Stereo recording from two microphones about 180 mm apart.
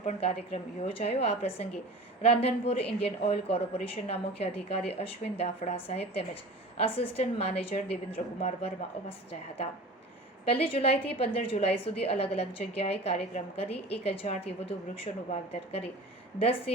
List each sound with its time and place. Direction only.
0.0 s a woman's voice: 35° left (ahead or behind)
10.4 s a woman's voice: 30° left (ahead or behind)